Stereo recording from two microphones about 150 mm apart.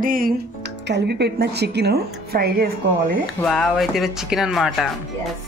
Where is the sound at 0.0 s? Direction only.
70° right (ahead or behind).